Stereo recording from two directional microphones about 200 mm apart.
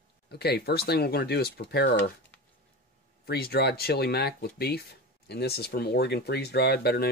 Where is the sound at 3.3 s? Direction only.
50° left (ahead or behind).